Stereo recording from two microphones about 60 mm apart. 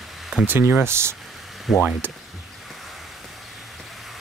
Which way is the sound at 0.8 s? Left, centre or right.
Right.